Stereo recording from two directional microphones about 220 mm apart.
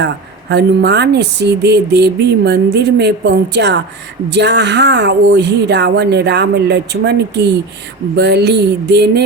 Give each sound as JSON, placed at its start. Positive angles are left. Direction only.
{"t": 0.5, "sound": "speech", "side_deg": -50}